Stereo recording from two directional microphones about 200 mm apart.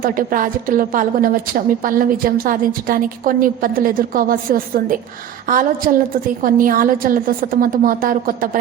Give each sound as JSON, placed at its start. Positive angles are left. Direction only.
{"t": 0.0, "sound": "a woman's voice", "side_deg": -45}